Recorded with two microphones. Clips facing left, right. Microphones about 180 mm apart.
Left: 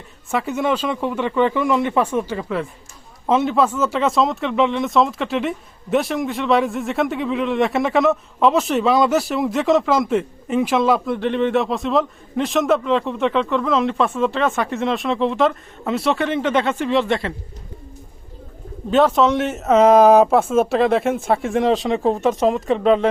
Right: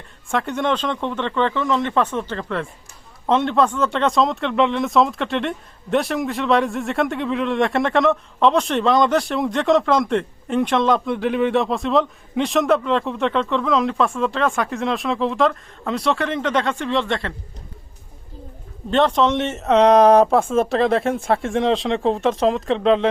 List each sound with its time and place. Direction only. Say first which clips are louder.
0.3 s speech: left 1 dB; 5° left (ahead or behind)
18.9 s speech: left 2 dB; 5° left (ahead or behind)